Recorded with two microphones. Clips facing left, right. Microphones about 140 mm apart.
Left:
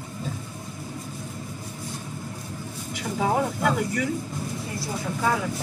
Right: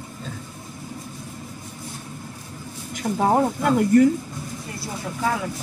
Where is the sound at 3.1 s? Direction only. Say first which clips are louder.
Right 6 dB; 35° right (ahead or behind).